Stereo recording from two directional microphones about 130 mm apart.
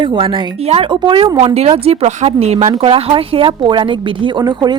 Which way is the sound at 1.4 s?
50° right (ahead or behind).